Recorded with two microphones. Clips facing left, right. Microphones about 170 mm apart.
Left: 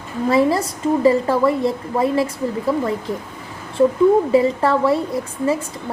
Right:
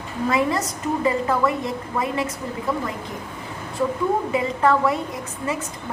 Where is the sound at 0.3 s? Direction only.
30° left (ahead or behind).